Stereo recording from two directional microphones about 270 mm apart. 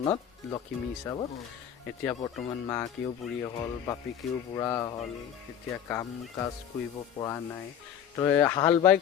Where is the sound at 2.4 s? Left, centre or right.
Centre.